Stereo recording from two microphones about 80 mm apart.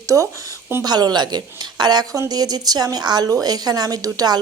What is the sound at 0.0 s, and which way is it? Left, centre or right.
Speech, right.